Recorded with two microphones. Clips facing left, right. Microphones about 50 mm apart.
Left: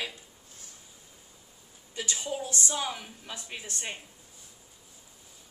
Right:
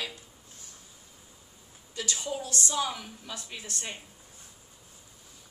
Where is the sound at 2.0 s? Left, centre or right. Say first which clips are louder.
Even; centre.